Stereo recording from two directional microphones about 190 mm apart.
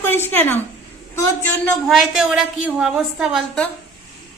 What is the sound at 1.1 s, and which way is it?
Speech, 15° left (ahead or behind).